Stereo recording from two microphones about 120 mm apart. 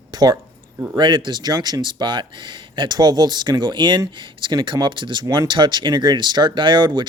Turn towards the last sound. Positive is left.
turn(degrees=-40)  # may be behind; listen again after turning